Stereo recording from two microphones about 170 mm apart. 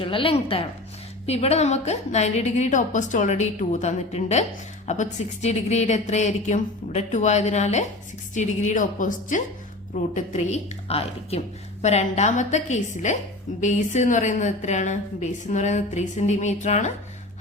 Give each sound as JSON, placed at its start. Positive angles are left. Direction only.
{"t": 0.0, "sound": "a woman's voice", "side_deg": 30}